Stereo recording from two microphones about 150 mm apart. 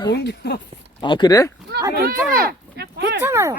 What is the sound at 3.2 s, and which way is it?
Speech, 20° right (ahead or behind).